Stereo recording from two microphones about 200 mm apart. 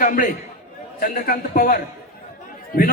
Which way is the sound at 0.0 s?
40° left (ahead or behind).